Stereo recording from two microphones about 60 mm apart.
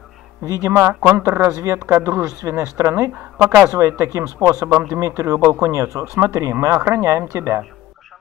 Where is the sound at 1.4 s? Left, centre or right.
Right.